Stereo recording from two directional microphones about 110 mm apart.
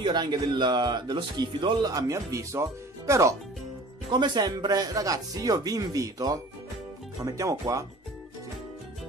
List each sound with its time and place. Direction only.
0.0 s speech: 40° right (ahead or behind)
4.1 s speech: 40° right (ahead or behind)